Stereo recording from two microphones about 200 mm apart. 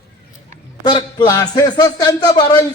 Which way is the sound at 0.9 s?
20° left (ahead or behind).